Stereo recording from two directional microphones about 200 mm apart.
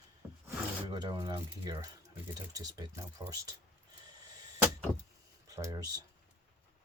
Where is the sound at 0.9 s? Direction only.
20° right (ahead or behind).